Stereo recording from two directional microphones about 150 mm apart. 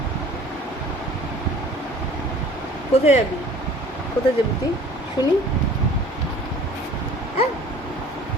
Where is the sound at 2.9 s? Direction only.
45° left (ahead or behind).